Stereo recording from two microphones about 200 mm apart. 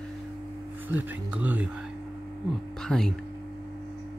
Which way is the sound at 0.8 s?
10° right (ahead or behind).